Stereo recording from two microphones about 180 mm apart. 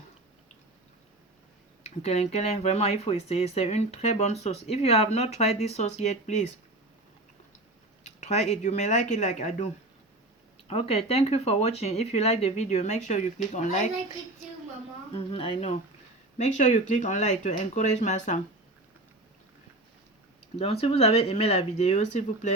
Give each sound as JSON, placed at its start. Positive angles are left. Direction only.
{"t": 1.8, "sound": "speech", "side_deg": 35}
{"t": 8.0, "sound": "speech", "side_deg": 40}
{"t": 10.7, "sound": "speech", "side_deg": 35}
{"t": 15.1, "sound": "speech", "side_deg": 30}
{"t": 20.6, "sound": "speech", "side_deg": 35}